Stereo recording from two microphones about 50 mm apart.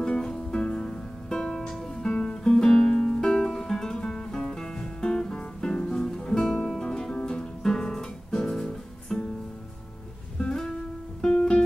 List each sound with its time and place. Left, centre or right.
0.0 s music: centre
10.5 s music: centre